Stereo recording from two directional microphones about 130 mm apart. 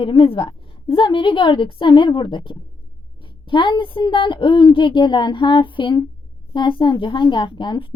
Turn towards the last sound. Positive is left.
turn(degrees=40)  # may be behind; listen again after turning